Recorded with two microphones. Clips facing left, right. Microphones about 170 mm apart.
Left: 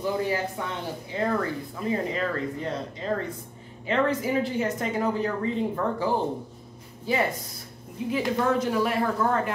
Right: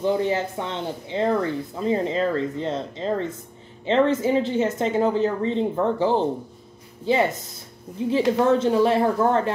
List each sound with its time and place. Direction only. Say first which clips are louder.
0.0 s speech: right 5 dB; 25° right (ahead or behind)